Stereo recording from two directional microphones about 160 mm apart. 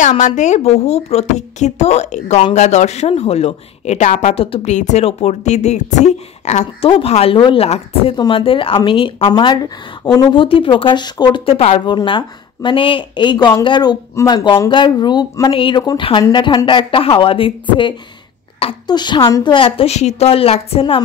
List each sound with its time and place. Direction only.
0.1 s a woman's voice: 45° left (ahead or behind)
11.8 s a woman's voice: 30° left (ahead or behind)